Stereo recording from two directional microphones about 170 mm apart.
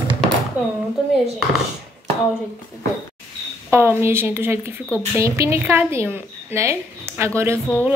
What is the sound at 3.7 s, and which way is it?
A woman's voice, 15° right (ahead or behind).